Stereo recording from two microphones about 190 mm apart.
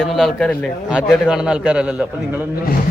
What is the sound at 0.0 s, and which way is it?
A man's voice, centre (ahead or behind).